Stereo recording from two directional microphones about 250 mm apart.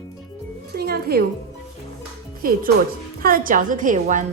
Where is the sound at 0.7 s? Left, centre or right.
Right.